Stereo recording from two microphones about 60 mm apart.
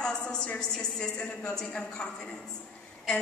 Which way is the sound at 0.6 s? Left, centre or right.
Centre.